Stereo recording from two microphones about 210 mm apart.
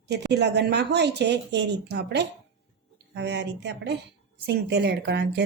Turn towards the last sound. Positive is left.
turn(degrees=-55)  # may be behind; listen again after turning